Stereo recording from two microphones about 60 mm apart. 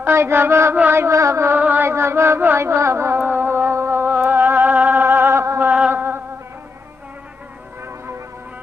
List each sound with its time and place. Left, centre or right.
0.1 s mantra: right
1.6 s chant: right
1.9 s mantra: right
3.2 s music: right
5.9 s a sound: right